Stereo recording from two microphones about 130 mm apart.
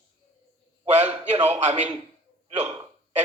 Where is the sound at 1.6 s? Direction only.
60° right (ahead or behind).